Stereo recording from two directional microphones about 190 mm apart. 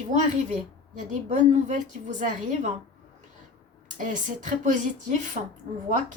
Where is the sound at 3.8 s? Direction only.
40° right (ahead or behind).